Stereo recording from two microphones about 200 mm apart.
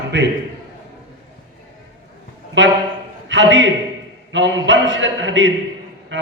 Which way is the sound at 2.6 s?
65° right (ahead or behind).